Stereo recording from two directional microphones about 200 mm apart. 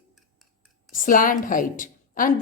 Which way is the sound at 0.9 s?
45° left (ahead or behind).